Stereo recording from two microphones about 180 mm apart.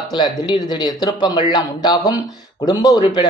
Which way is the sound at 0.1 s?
20° left (ahead or behind).